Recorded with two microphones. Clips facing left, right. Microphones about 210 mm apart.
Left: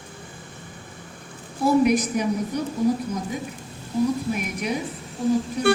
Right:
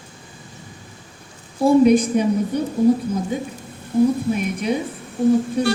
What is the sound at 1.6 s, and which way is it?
Speech, 30° right (ahead or behind).